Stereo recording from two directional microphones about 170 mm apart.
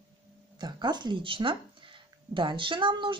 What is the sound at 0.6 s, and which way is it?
Speech, 25° right (ahead or behind).